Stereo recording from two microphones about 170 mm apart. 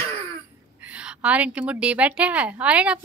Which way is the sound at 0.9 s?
5° right (ahead or behind).